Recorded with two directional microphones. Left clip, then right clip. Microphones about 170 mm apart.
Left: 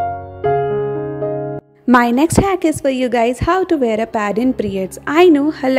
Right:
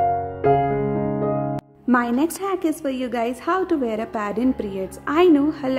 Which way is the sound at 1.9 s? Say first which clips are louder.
Left 8 dB; 40° left (ahead or behind).